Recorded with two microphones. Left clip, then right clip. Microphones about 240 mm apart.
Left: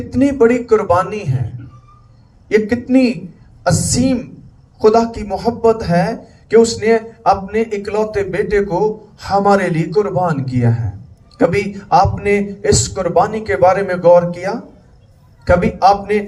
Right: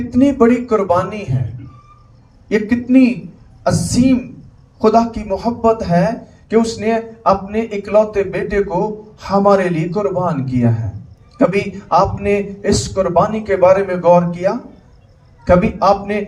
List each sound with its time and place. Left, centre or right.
0.1 s a man's voice: left
2.5 s speech: left